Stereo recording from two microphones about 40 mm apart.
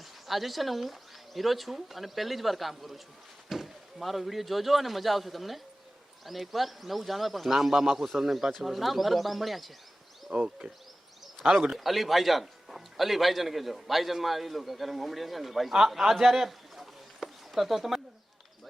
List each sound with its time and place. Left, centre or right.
0.0 s a man's voice: centre
10.3 s speech: right
11.7 s a man's voice: centre
15.9 s a sound: centre